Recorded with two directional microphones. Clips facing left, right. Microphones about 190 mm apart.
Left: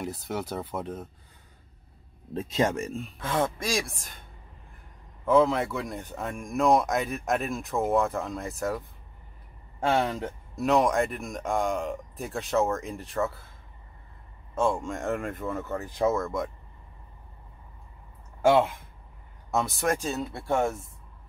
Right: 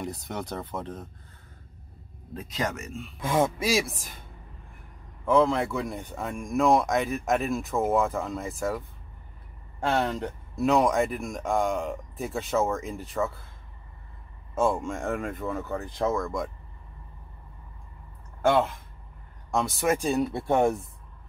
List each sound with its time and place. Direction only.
0.0 s speech: 5° left (ahead or behind)
2.3 s speech: 25° left (ahead or behind)
3.2 s speech: 10° right (ahead or behind)
5.2 s speech: 5° left (ahead or behind)
14.5 s speech: 5° right (ahead or behind)
18.4 s speech: 10° left (ahead or behind)
20.0 s speech: 15° right (ahead or behind)